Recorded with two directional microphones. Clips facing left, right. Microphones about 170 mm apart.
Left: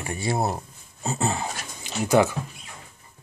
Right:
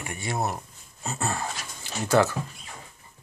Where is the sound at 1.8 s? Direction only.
15° left (ahead or behind).